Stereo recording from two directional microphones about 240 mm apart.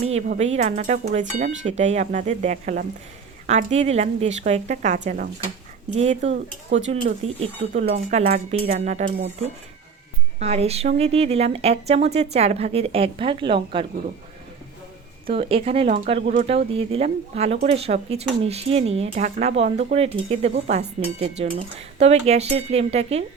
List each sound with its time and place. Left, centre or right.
0.0 s speech: right
10.4 s speech: right
15.3 s speech: right